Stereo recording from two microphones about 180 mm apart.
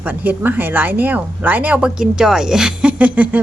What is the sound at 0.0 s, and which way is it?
Speech, 10° right (ahead or behind).